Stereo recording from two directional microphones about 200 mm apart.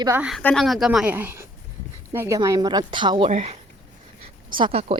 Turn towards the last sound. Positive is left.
turn(degrees=-30)  # may be behind; listen again after turning